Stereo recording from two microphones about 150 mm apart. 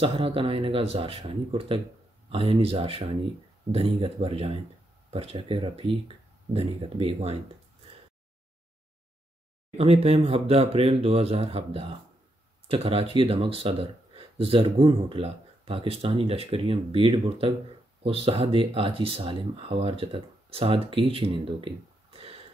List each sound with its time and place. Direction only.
0.0 s speech: 40° right (ahead or behind)
9.8 s speech: 40° right (ahead or behind)